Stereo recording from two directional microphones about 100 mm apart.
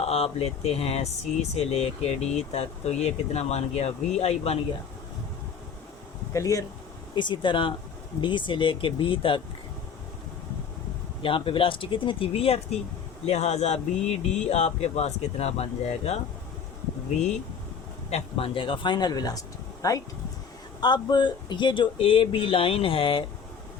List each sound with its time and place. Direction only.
0.0 s speech: 85° left
6.3 s speech: 35° left (ahead or behind)
7.2 s speech: 50° left (ahead or behind)
11.2 s speech: 60° left (ahead or behind)
13.2 s speech: 90° left
18.1 s speech: 70° left (ahead or behind); by 20.0 s 35° left (ahead or behind)
20.8 s speech: 45° left (ahead or behind); by 23.2 s 65° left (ahead or behind)